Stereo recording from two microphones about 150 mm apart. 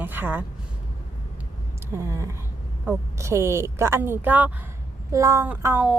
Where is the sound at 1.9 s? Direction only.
20° right (ahead or behind).